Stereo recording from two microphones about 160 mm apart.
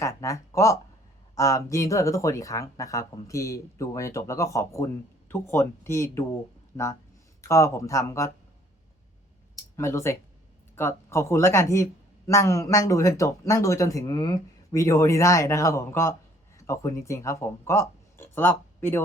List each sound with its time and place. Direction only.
0.0 s a sound: 20° left (ahead or behind)
1.4 s speech: 20° left (ahead or behind)
9.7 s speech: 15° left (ahead or behind)